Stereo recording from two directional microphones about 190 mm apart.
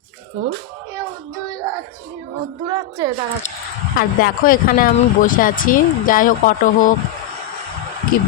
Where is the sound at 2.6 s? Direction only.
20° right (ahead or behind).